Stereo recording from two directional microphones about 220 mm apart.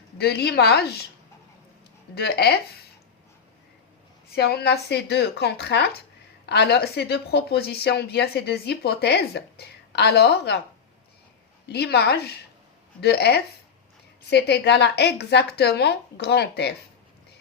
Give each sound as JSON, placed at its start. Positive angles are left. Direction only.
{"t": 0.2, "sound": "speech", "side_deg": 45}
{"t": 2.1, "sound": "speech", "side_deg": 45}
{"t": 4.4, "sound": "speech", "side_deg": 45}
{"t": 11.7, "sound": "speech", "side_deg": 45}